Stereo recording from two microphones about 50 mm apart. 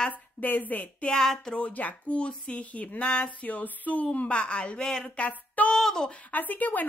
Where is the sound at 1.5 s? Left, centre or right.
Left.